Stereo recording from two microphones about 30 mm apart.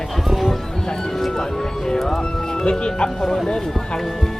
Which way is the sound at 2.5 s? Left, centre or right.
Left.